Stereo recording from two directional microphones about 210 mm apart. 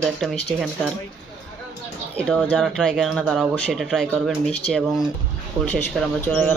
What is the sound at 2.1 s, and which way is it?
Speech, 5° left (ahead or behind).